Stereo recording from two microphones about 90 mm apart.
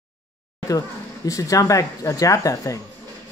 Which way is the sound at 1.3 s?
40° left (ahead or behind).